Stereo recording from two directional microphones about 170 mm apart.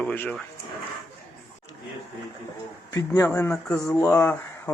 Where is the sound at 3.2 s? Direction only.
10° left (ahead or behind).